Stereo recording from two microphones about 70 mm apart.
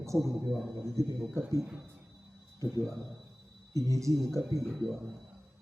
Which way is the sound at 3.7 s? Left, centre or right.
Right.